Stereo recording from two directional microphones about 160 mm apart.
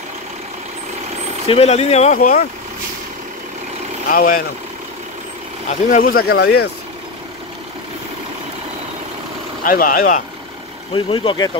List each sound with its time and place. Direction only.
1.5 s speech: 40° left (ahead or behind)
2.1 s speech: 60° left (ahead or behind)
4.1 s speech: 65° left (ahead or behind)
5.7 s speech: 55° left (ahead or behind); by 6.7 s 90° left
9.7 s speech: 60° left (ahead or behind)
10.9 s speech: 30° left (ahead or behind)